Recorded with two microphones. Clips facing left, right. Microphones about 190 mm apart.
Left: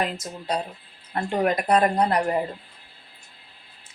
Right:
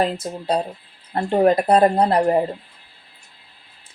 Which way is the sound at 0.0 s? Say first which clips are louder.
Right 6 dB; 30° right (ahead or behind).